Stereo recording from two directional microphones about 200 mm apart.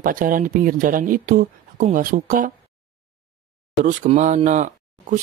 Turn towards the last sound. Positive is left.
turn(degrees=-35)  # may be behind; listen again after turning